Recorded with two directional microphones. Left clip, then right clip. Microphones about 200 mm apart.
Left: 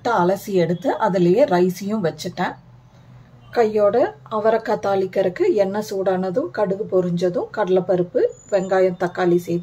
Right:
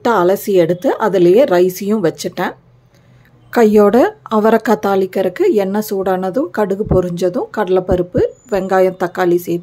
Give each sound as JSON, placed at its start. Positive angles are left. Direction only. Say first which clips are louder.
{"t": 0.0, "sound": "a woman's voice", "louder": "right 6 dB", "side_deg": -35}
{"t": 3.5, "sound": "a woman's voice", "louder": "right 6 dB", "side_deg": -40}